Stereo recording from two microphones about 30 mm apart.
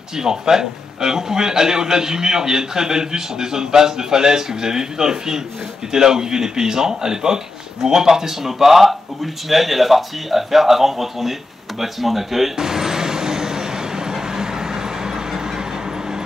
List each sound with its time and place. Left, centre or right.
0.1 s a man's voice: centre
12.5 s vehicle: centre